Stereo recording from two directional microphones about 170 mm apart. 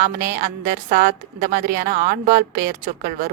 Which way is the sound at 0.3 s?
55° right (ahead or behind).